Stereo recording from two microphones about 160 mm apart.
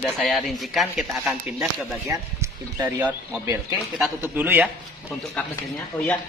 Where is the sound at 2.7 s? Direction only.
10° right (ahead or behind).